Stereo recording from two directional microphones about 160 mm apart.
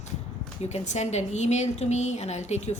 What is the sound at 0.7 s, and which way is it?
A woman's voice, 45° left (ahead or behind).